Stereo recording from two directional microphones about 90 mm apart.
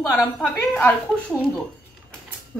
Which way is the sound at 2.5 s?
5° left (ahead or behind).